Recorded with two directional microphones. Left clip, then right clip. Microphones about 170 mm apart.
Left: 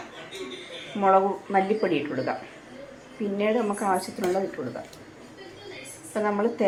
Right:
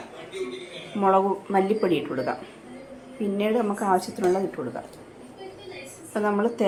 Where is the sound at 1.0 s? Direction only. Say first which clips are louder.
Even; 10° right (ahead or behind).